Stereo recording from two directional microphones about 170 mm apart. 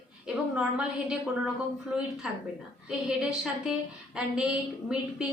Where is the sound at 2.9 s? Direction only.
5° right (ahead or behind).